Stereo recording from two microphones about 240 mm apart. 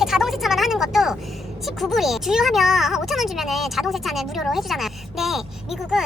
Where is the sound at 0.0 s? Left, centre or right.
Centre.